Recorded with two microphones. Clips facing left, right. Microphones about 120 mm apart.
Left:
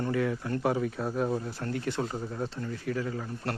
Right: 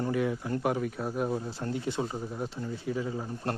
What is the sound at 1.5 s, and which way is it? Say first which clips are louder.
Speech: even; 20° right (ahead or behind).